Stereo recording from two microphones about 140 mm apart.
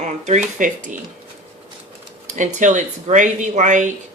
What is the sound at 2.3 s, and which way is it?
Speech, 60° right (ahead or behind).